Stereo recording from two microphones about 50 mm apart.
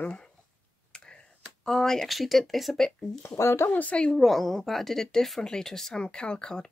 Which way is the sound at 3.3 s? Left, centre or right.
Left.